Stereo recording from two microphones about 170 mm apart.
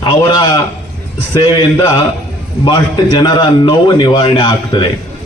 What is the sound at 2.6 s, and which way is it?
A man's voice, 25° left (ahead or behind).